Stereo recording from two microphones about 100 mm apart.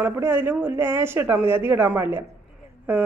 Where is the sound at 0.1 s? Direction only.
25° right (ahead or behind).